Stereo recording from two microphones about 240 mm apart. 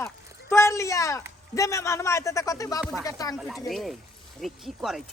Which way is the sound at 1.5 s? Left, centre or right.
Centre.